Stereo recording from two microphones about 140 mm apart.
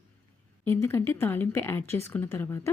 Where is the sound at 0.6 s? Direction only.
15° left (ahead or behind).